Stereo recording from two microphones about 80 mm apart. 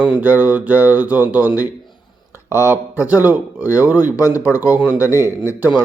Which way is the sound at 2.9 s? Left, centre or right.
Right.